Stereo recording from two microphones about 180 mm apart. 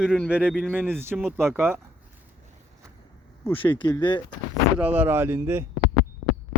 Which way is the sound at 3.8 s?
25° left (ahead or behind).